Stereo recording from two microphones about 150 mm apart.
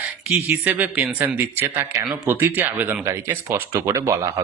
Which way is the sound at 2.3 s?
15° right (ahead or behind).